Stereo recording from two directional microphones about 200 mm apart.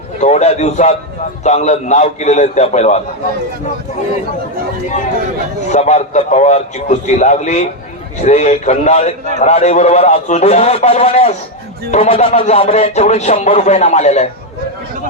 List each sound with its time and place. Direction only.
0.2 s a man's voice: 35° left (ahead or behind)
5.7 s a man's voice: 35° left (ahead or behind)